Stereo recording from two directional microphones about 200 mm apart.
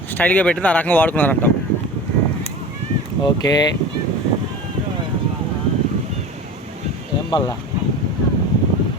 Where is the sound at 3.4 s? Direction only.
20° left (ahead or behind).